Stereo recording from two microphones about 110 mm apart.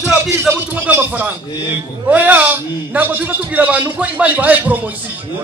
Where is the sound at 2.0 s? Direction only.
15° right (ahead or behind).